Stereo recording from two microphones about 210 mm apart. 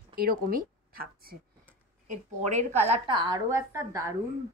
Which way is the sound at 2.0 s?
35° right (ahead or behind).